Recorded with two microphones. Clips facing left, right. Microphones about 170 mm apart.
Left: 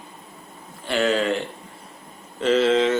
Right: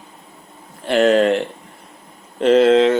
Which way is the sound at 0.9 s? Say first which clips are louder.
Right 8 dB; 60° right (ahead or behind).